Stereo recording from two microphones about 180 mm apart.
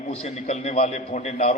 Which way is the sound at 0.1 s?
35° left (ahead or behind).